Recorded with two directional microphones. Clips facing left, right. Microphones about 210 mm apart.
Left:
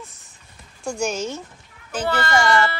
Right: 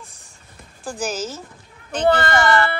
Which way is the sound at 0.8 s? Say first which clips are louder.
Left 2 dB; centre (ahead or behind).